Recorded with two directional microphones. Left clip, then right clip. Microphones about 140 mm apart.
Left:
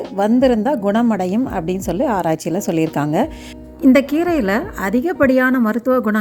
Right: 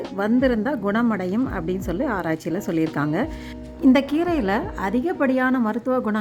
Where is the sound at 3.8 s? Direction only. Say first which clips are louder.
Left 5 dB; 20° left (ahead or behind).